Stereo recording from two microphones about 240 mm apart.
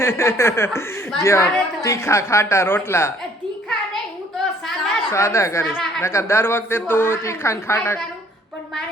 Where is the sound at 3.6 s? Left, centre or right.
Centre.